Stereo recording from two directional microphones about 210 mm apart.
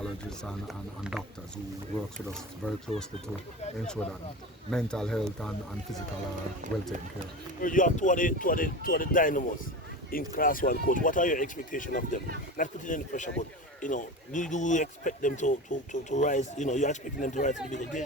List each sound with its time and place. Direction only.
0.0 s speech: centre (ahead or behind)
4.7 s speech: 5° left (ahead or behind)
7.6 s speech: 40° left (ahead or behind)